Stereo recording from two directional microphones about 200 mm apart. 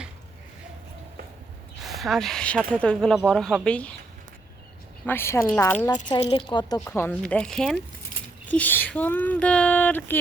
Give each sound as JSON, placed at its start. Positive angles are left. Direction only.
{"t": 1.8, "sound": "speech", "side_deg": 0}
{"t": 5.0, "sound": "speech", "side_deg": 10}
{"t": 6.1, "sound": "a woman's voice", "side_deg": 30}
{"t": 6.7, "sound": "speech", "side_deg": 10}